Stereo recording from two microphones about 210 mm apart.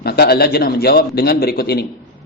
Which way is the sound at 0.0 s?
50° left (ahead or behind).